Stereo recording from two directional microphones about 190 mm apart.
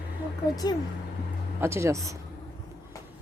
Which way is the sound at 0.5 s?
20° left (ahead or behind).